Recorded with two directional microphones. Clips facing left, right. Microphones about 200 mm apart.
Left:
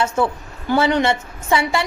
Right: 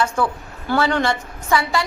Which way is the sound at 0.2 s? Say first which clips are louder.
Left 2 dB; 25° left (ahead or behind).